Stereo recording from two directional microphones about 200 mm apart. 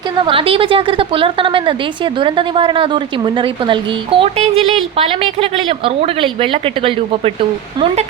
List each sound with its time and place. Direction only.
0.3 s a woman's voice: 25° right (ahead or behind)